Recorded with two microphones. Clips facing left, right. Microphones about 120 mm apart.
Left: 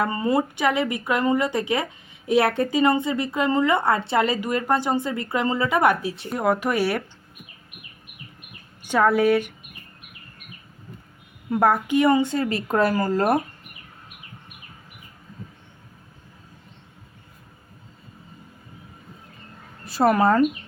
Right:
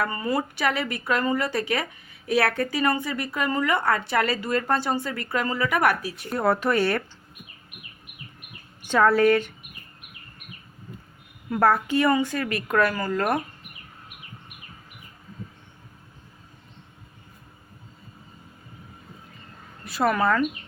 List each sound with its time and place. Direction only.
0.0 s speech: 25° left (ahead or behind)
6.4 s speech: 15° left (ahead or behind)
8.8 s speech: 15° left (ahead or behind)
11.5 s speech: 15° left (ahead or behind)
19.8 s a woman's voice: 35° left (ahead or behind)